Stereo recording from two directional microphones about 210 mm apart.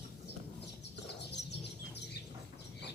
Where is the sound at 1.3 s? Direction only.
55° left (ahead or behind).